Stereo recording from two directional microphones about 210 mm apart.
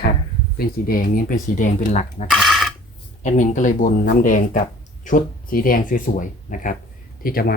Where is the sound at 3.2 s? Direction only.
35° left (ahead or behind).